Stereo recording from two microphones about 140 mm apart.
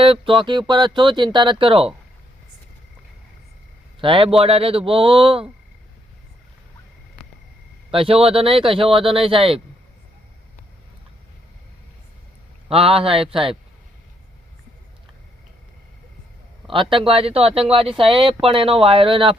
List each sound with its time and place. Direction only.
0.0 s speech: 40° right (ahead or behind)
4.0 s speech: 40° right (ahead or behind)
7.9 s speech: 40° right (ahead or behind)
12.6 s speech: 45° right (ahead or behind)
16.6 s speech: 40° right (ahead or behind)